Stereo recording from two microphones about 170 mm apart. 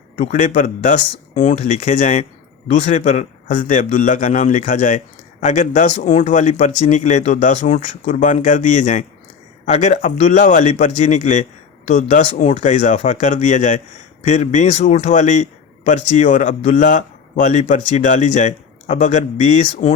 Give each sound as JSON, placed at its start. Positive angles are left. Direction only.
{"t": 0.2, "sound": "a man's voice", "side_deg": 50}